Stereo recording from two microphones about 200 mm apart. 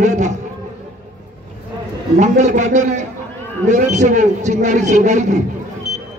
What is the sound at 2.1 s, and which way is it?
A man's voice, 35° right (ahead or behind).